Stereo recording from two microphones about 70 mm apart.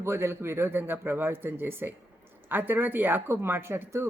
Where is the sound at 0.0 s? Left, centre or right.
Right.